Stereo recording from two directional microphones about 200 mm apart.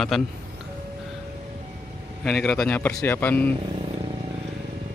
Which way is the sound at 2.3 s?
Centre (ahead or behind).